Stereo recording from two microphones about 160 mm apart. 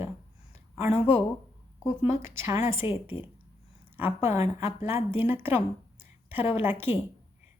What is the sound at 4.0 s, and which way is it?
A woman's voice, 15° right (ahead or behind).